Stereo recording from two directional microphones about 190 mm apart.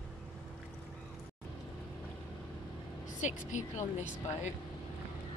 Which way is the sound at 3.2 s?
40° left (ahead or behind).